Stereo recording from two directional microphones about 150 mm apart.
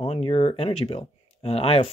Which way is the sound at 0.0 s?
40° left (ahead or behind).